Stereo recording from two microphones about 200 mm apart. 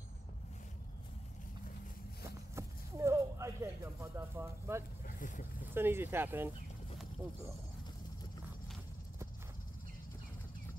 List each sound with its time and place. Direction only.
2.2 s a sound: 15° right (ahead or behind)
5.0 s vehicle: 40° left (ahead or behind)
5.8 s speech: 10° right (ahead or behind)